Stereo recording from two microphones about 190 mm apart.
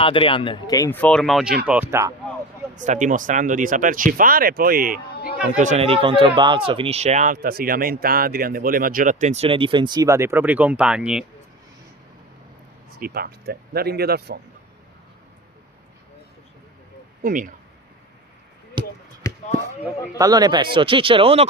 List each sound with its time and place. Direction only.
0.0 s speech: 30° left (ahead or behind); by 2.1 s 15° right (ahead or behind)
2.7 s speech: 40° right (ahead or behind)
5.5 s speech: 35° right (ahead or behind); by 11.3 s 5° right (ahead or behind)
13.0 s speech: 55° right (ahead or behind)
17.2 s speech: 45° right (ahead or behind)
18.8 s basketball bounce: 25° right (ahead or behind)
19.2 s basketball bounce: 15° left (ahead or behind)
20.1 s speech: 20° right (ahead or behind)